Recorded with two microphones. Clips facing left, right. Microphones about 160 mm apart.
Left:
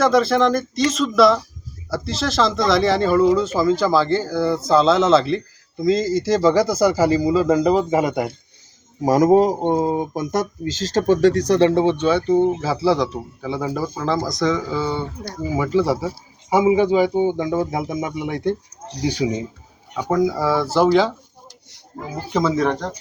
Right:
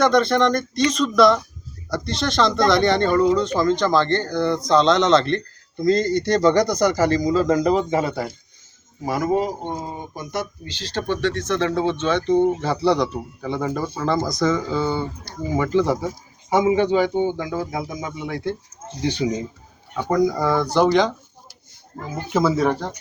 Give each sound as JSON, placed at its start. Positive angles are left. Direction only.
{"t": 0.0, "sound": "speech", "side_deg": 5}
{"t": 9.0, "sound": "speech", "side_deg": 40}
{"t": 22.3, "sound": "speech", "side_deg": -5}